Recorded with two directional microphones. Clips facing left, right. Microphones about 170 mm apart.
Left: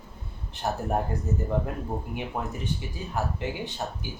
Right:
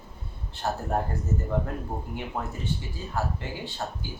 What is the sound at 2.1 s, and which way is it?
Speech, 15° left (ahead or behind).